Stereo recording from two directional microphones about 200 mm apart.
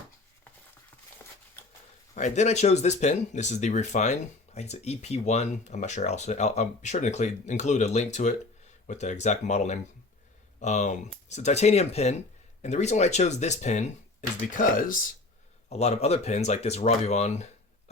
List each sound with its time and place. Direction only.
2.1 s speech: 35° left (ahead or behind)
15.7 s speech: 30° left (ahead or behind)